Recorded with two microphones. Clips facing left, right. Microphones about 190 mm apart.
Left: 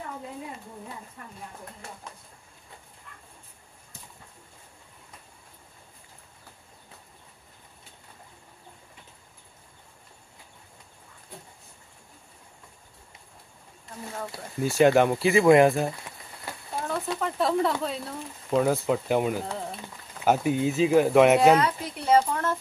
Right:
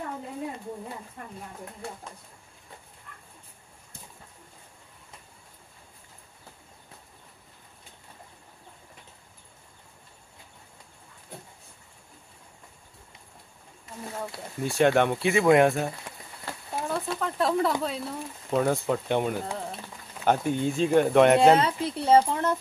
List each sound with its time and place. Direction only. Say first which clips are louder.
14.6 s speech: left 2 dB; centre (ahead or behind)
16.8 s a sound: left 1 dB; centre (ahead or behind)
17.8 s speech: right 1 dB; centre (ahead or behind)
21.5 s speech: right 1 dB; 30° right (ahead or behind)